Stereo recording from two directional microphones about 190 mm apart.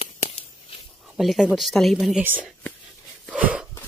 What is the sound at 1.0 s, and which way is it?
Speech, centre (ahead or behind).